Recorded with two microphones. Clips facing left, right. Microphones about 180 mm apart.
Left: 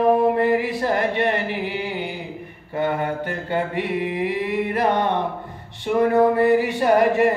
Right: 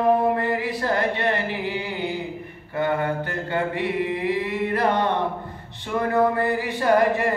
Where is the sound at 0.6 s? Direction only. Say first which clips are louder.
Left 2 dB; 15° left (ahead or behind).